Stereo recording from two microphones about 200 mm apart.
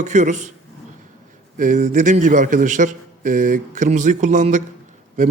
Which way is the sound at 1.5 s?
40° right (ahead or behind).